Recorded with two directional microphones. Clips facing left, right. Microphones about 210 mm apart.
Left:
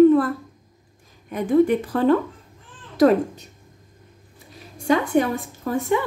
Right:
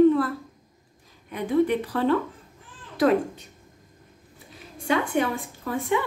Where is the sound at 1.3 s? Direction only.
45° left (ahead or behind).